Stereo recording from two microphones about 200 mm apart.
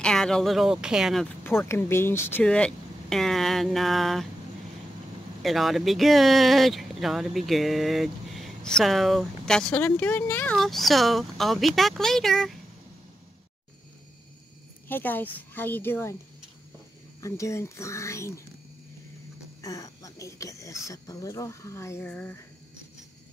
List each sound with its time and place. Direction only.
0.0 s speech: 5° left (ahead or behind)
1.4 s speech: 10° left (ahead or behind)
5.4 s speech: centre (ahead or behind)
14.9 s speech: 10° left (ahead or behind)
17.2 s speech: 15° left (ahead or behind)
19.6 s speech: 15° left (ahead or behind)